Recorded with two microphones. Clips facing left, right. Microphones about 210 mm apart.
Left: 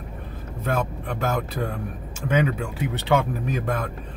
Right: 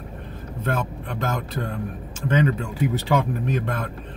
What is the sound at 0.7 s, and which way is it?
Speech, 10° left (ahead or behind).